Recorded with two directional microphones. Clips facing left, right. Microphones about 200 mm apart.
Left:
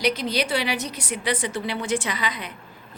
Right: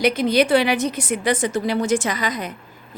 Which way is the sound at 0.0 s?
50° right (ahead or behind).